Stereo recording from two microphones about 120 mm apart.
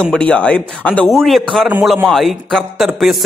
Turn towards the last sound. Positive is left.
turn(degrees=0)  # may be behind; listen again after turning